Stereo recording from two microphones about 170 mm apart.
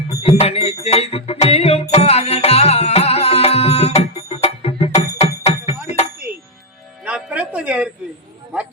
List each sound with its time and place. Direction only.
0.2 s music: 35° left (ahead or behind)
7.0 s music: 10° right (ahead or behind)